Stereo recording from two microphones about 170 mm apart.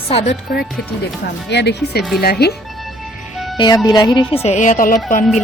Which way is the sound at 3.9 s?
25° left (ahead or behind).